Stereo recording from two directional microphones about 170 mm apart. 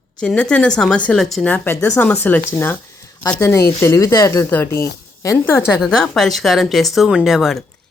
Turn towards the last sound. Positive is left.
turn(degrees=0)  # may be behind; listen again after turning